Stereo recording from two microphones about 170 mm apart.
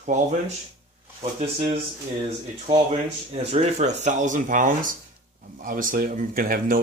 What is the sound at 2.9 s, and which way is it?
Speech, 35° right (ahead or behind).